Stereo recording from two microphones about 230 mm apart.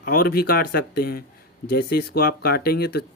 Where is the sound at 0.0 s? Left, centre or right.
Left.